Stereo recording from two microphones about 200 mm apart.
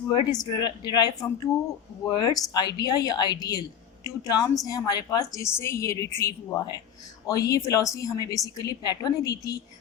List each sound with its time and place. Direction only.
0.1 s a woman's voice: 20° left (ahead or behind)